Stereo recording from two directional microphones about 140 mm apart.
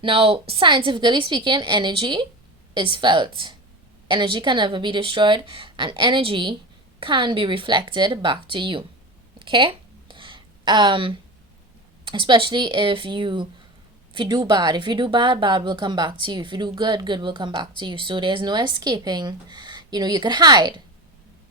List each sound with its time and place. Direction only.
0.0 s speech: 40° right (ahead or behind)
9.4 s a sound: 35° right (ahead or behind)
12.0 s speech: 35° right (ahead or behind)